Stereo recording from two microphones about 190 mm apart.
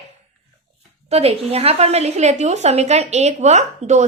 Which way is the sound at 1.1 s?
35° right (ahead or behind).